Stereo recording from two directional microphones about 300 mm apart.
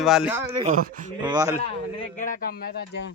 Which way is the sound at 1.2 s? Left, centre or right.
Centre.